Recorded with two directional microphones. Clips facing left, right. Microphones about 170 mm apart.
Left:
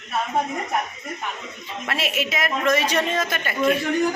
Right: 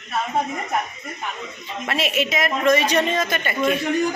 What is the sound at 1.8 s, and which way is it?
A man's voice, centre (ahead or behind).